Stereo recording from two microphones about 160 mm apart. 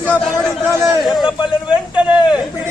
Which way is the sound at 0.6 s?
15° right (ahead or behind).